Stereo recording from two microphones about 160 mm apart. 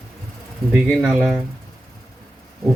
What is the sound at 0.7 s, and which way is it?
Speech, 5° right (ahead or behind).